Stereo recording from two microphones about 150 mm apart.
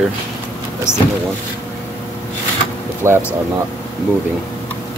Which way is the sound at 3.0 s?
15° right (ahead or behind).